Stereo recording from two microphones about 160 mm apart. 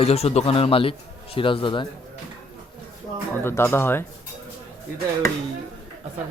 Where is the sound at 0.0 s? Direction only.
40° left (ahead or behind).